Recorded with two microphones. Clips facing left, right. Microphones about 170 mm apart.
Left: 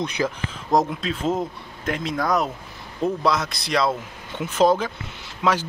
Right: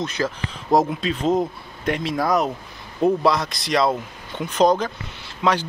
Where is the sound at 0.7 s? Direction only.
Centre (ahead or behind).